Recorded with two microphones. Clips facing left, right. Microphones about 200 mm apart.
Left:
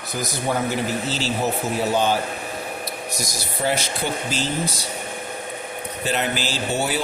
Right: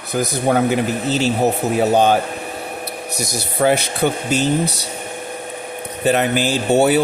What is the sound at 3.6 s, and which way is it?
Speech, 65° right (ahead or behind).